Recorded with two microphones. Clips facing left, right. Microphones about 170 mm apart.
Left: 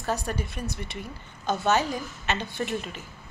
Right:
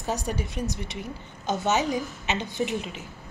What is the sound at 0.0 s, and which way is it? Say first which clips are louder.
A woman's voice: even; 15° right (ahead or behind).